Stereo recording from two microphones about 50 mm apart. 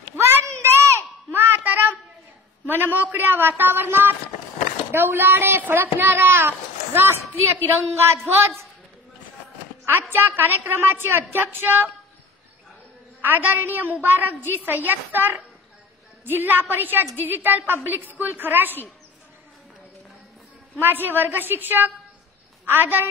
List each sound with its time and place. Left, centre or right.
0.1 s a sound: right
1.3 s a sound: right
2.6 s a woman's voice: right
10.0 s speech: right
13.2 s a woman's voice: right
20.8 s speech: right